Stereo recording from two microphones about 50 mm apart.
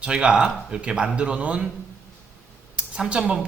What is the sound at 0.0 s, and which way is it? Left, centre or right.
A man's voice, centre.